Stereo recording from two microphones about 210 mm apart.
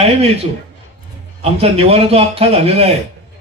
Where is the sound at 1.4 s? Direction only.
30° right (ahead or behind).